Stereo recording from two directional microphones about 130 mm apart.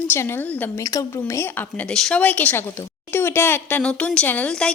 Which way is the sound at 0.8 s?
25° left (ahead or behind).